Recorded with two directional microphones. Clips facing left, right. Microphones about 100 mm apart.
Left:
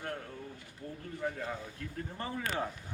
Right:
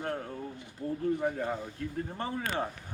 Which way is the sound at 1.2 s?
20° right (ahead or behind).